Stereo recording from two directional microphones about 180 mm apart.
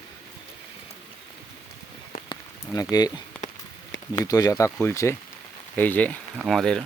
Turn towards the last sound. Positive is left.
turn(degrees=0)  # may be behind; listen again after turning